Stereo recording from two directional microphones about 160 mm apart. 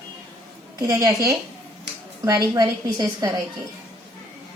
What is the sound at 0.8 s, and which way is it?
A woman's voice, 20° right (ahead or behind).